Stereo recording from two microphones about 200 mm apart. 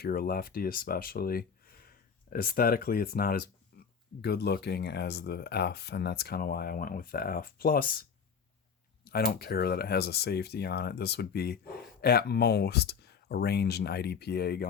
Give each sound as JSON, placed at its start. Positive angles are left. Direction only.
{"t": 0.0, "sound": "speech", "side_deg": 50}
{"t": 3.7, "sound": "a sound", "side_deg": 50}
{"t": 4.2, "sound": "speech", "side_deg": 55}
{"t": 9.0, "sound": "speech", "side_deg": 50}